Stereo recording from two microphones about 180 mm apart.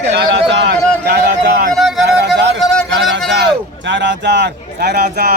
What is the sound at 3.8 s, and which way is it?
A man's voice, 80° right.